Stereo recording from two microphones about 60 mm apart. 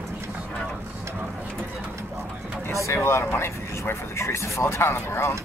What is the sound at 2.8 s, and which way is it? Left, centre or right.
Speech, left.